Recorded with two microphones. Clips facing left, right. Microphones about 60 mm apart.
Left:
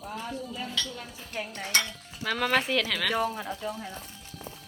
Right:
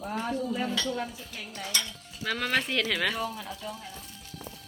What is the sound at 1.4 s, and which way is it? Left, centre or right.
Stir, left.